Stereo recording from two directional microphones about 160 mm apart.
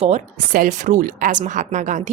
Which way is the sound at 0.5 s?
55° right (ahead or behind).